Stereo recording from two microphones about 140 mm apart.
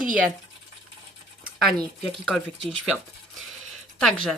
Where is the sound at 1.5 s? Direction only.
Centre (ahead or behind).